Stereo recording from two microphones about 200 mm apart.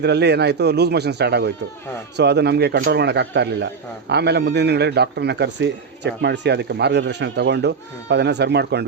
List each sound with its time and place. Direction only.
0.0 s a man's voice: 55° right (ahead or behind)